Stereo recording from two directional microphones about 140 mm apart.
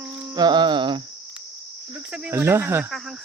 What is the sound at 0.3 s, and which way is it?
Cricket, 30° right (ahead or behind).